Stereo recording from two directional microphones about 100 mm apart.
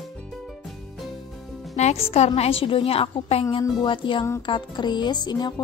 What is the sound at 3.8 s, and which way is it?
Music, 55° left (ahead or behind).